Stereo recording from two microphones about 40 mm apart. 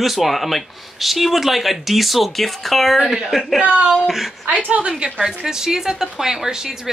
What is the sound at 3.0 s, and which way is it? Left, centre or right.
Speech, centre.